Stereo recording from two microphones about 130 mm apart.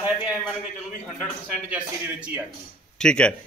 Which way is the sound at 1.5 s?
10° right (ahead or behind).